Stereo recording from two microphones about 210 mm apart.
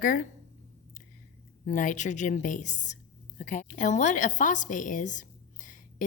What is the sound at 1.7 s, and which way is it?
A woman's voice, 35° left (ahead or behind).